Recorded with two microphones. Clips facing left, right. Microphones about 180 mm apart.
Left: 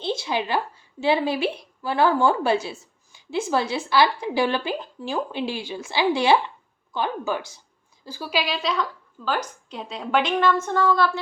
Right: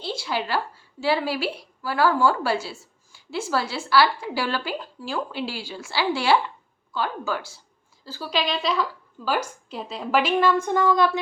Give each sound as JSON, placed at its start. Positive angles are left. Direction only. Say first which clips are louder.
{"t": 0.0, "sound": "a woman's voice", "louder": "left 3 dB", "side_deg": 20}